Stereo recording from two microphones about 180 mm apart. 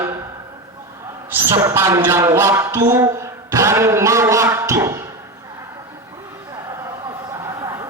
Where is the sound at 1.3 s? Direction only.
10° right (ahead or behind).